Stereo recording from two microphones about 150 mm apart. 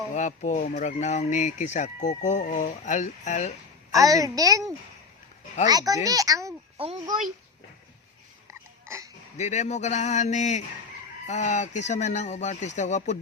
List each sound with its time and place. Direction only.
0.1 s speech: 55° left (ahead or behind)
3.9 s a woman's voice: 25° right (ahead or behind)
5.6 s a woman's voice: 25° right (ahead or behind)
6.7 s speech: 40° right (ahead or behind)
8.4 s a sound: 20° right (ahead or behind)
9.4 s speech: 50° left (ahead or behind)